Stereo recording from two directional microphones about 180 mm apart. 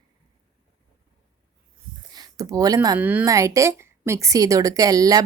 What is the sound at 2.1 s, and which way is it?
Speech, 20° right (ahead or behind).